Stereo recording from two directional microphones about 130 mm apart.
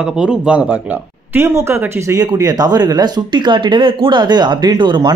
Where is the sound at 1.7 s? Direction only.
25° right (ahead or behind).